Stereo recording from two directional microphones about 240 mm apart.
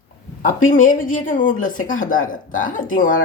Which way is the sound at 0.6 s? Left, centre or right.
Left.